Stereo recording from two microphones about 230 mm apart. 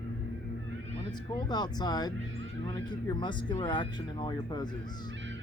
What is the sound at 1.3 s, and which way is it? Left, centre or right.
Speech, centre.